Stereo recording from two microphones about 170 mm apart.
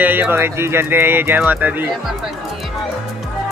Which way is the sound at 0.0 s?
10° right (ahead or behind).